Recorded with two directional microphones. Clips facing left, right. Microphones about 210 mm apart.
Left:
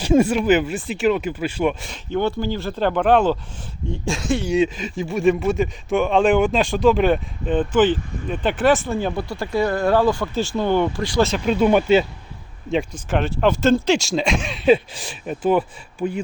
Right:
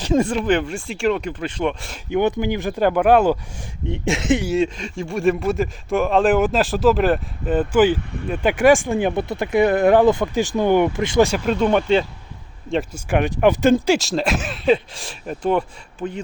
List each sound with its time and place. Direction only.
0.0 s speech: 10° left (ahead or behind)
2.0 s speech: 15° right (ahead or behind)
3.9 s speech: 20° right (ahead or behind)
4.4 s speech: centre (ahead or behind); by 11.3 s 20° right (ahead or behind)
11.4 s speech: 5° left (ahead or behind)
12.9 s speech: 15° right (ahead or behind); by 16.2 s 10° left (ahead or behind)